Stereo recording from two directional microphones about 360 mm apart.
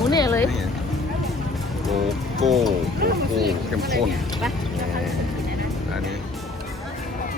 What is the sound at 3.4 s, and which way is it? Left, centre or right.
Speech, centre.